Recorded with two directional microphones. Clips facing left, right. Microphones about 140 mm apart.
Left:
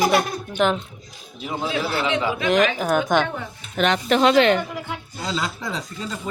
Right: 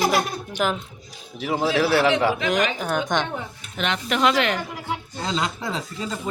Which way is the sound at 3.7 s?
40° left (ahead or behind).